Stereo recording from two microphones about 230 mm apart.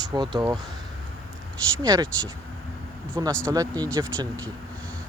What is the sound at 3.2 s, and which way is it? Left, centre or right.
Speech, centre.